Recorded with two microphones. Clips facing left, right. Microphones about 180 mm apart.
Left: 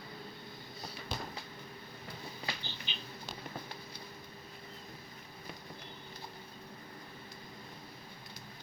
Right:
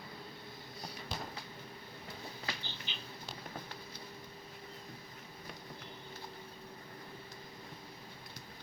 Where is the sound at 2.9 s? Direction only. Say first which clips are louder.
Left 1 dB; 20° left (ahead or behind).